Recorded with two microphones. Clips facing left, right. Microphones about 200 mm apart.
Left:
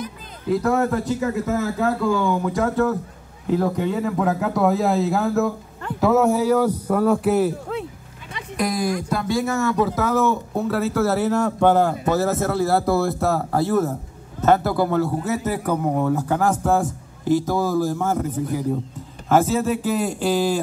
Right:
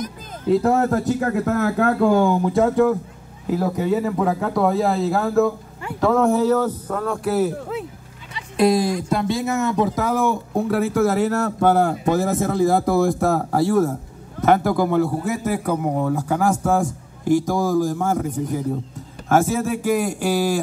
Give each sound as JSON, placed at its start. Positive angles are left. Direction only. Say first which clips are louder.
{"t": 0.5, "sound": "speech", "louder": "right 2 dB", "side_deg": -30}
{"t": 2.2, "sound": "a man's voice", "louder": "right 3 dB", "side_deg": -30}
{"t": 8.5, "sound": "a man's voice", "louder": "right 5 dB", "side_deg": -30}